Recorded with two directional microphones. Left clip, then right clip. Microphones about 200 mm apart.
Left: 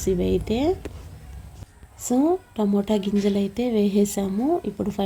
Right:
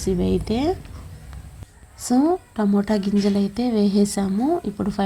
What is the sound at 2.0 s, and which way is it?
A woman's voice, 15° right (ahead or behind).